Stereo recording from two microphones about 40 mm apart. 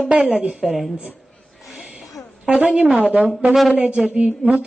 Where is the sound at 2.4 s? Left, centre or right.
Right.